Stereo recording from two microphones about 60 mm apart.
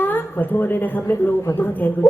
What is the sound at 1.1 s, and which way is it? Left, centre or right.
Speech, left.